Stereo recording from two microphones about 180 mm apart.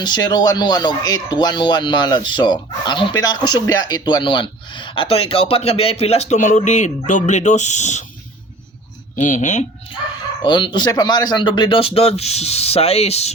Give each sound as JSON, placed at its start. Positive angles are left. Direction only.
{"t": 0.0, "sound": "speech", "side_deg": 25}
{"t": 9.1, "sound": "speech", "side_deg": 45}
{"t": 10.4, "sound": "speech", "side_deg": 25}